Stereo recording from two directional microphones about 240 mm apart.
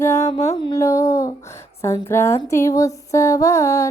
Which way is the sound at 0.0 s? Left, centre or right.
Centre.